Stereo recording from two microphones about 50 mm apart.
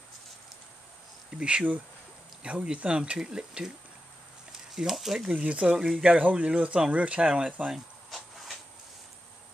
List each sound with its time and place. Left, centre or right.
1.4 s speech: right; by 5.3 s centre
5.3 s speech: right
5.9 s speech: centre
6.1 s speech: right